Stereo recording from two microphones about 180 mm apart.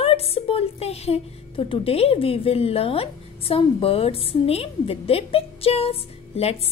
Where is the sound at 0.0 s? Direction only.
35° left (ahead or behind).